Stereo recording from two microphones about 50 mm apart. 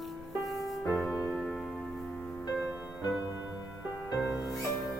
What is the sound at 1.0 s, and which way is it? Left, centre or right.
Music, left.